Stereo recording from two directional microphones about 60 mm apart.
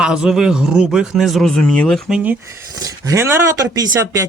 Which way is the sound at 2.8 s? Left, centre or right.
Right.